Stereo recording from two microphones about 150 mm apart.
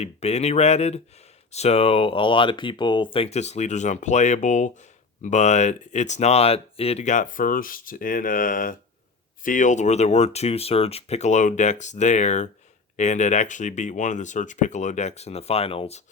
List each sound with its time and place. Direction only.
0.0 s speech: 45° left (ahead or behind)